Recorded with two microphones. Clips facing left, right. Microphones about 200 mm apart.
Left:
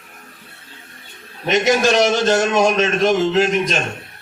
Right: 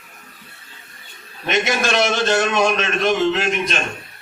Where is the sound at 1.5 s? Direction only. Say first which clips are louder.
Left 5 dB; 40° left (ahead or behind).